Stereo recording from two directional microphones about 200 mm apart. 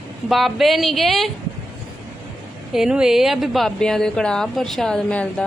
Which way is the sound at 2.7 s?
5° right (ahead or behind).